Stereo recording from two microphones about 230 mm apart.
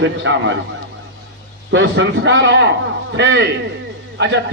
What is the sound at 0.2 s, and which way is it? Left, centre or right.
Speech, right.